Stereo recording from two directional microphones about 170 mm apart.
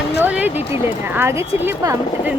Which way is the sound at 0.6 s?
35° left (ahead or behind).